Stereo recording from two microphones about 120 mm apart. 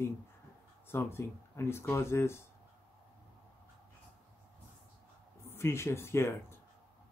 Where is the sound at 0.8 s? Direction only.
20° left (ahead or behind).